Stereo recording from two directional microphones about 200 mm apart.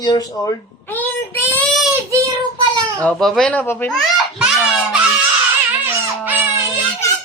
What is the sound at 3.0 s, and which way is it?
Speech, 5° left (ahead or behind).